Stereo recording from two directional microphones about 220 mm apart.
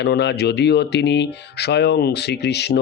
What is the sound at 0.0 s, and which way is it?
Speech, 50° left (ahead or behind).